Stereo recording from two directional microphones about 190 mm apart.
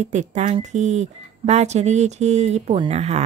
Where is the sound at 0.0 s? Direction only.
40° right (ahead or behind).